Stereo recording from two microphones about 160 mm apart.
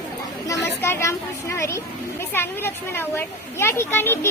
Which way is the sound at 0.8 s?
15° left (ahead or behind).